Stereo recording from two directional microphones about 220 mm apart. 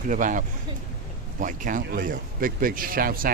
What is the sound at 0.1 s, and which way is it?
A man's voice, 35° right (ahead or behind).